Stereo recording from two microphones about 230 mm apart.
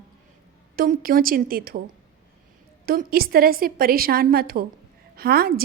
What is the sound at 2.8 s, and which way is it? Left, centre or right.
A woman's voice, right.